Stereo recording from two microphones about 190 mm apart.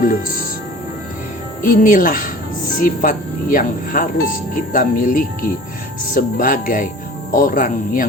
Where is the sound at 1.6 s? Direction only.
45° left (ahead or behind).